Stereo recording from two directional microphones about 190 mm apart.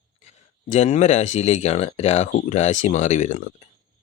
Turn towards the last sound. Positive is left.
turn(degrees=35)  # may be behind; listen again after turning